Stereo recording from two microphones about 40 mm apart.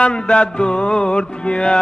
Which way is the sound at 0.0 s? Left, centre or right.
Left.